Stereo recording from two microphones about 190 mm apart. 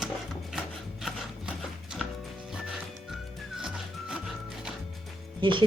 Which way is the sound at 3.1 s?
Centre (ahead or behind).